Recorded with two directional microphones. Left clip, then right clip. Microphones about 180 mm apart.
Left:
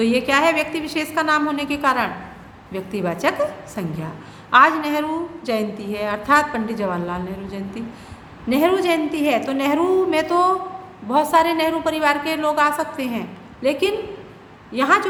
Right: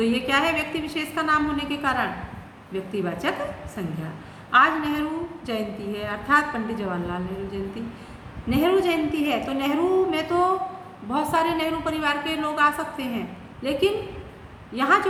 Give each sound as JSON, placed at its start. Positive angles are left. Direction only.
{"t": 0.0, "sound": "a woman's voice", "side_deg": 40}
{"t": 8.4, "sound": "a woman's voice", "side_deg": 40}